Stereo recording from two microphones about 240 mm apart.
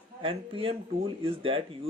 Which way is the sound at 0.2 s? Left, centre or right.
Right.